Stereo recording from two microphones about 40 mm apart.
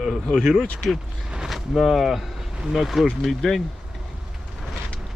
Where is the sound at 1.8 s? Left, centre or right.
Centre.